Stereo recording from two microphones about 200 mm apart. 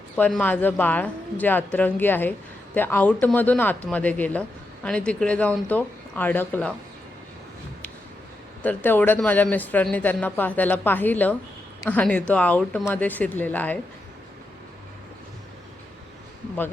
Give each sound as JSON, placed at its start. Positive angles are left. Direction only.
{"t": 0.2, "sound": "speech", "side_deg": 5}
{"t": 8.6, "sound": "speech", "side_deg": 10}